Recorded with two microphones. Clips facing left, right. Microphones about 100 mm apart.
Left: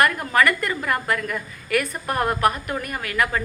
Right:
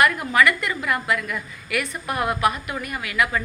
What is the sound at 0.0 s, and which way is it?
A woman's voice, 45° left (ahead or behind).